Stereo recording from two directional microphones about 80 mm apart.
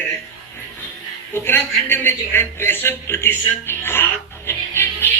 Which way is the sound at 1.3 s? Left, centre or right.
Left.